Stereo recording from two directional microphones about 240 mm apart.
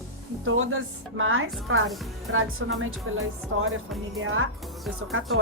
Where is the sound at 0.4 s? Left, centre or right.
Right.